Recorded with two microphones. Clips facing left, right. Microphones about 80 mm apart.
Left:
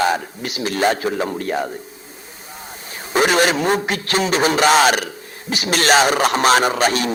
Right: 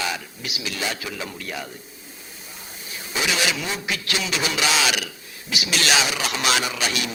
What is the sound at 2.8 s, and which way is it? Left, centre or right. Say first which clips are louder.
A man's voice: left 9 dB; left.